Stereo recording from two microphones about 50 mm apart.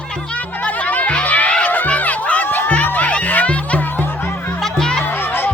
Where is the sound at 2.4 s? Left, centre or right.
Left.